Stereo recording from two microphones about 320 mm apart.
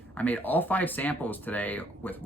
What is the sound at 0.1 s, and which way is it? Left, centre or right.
Speech, centre.